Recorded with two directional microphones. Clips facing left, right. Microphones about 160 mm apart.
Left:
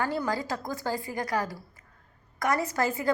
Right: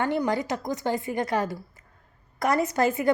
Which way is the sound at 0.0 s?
20° right (ahead or behind).